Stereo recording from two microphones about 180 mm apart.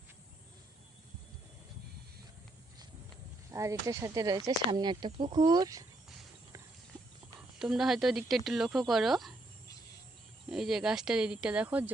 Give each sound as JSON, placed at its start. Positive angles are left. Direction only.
{"t": 3.5, "sound": "speech", "side_deg": -20}
{"t": 7.6, "sound": "speech", "side_deg": 0}
{"t": 10.5, "sound": "speech", "side_deg": 0}